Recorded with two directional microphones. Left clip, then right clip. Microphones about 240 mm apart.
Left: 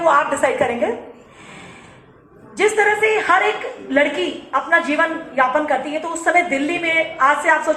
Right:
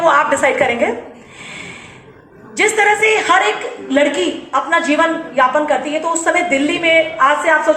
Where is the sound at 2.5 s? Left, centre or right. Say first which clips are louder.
Right 3 dB; right.